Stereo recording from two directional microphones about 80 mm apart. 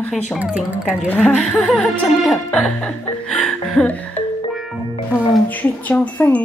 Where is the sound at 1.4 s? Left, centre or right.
Centre.